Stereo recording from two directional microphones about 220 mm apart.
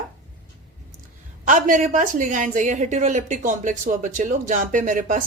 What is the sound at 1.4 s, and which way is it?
Speech, 35° right (ahead or behind).